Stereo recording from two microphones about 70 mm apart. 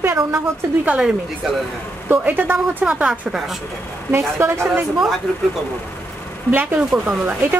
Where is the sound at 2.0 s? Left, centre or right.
Right.